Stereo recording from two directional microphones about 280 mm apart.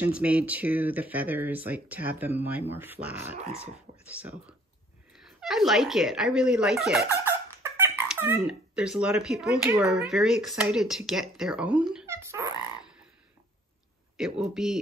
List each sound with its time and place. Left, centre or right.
0.0 s speech: centre
14.1 s speech: centre